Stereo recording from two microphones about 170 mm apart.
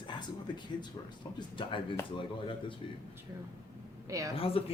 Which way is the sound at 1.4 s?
30° left (ahead or behind).